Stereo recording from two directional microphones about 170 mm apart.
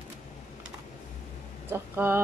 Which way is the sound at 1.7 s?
15° right (ahead or behind).